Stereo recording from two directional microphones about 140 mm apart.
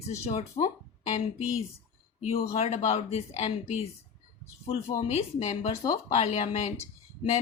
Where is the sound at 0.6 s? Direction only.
50° left (ahead or behind).